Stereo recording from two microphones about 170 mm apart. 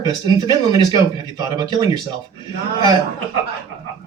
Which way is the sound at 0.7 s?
20° right (ahead or behind).